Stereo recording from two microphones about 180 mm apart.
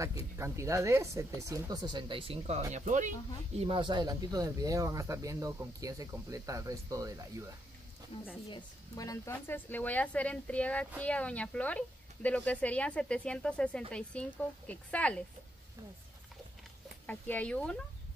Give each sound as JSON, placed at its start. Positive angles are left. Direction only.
{"t": 0.4, "sound": "speech", "side_deg": -15}
{"t": 3.5, "sound": "speech", "side_deg": -30}
{"t": 8.5, "sound": "speech", "side_deg": 20}
{"t": 17.0, "sound": "speech", "side_deg": 10}